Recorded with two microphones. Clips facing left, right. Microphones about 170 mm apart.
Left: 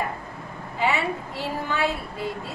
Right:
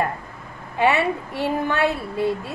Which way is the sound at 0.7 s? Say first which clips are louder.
Right 5 dB; 60° right (ahead or behind).